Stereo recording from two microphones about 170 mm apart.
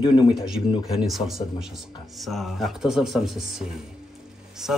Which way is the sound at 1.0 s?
Centre (ahead or behind).